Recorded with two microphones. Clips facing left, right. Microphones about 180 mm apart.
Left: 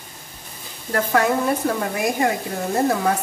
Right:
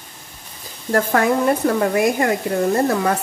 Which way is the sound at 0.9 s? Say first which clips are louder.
Right 2 dB; 50° right (ahead or behind).